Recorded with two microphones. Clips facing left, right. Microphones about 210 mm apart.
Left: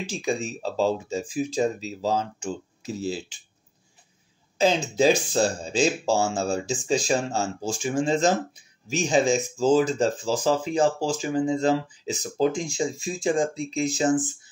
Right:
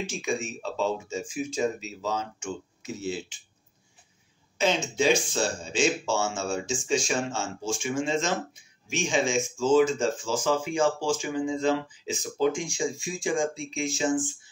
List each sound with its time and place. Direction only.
0.1 s speech: 35° left (ahead or behind)
4.6 s speech: 35° left (ahead or behind)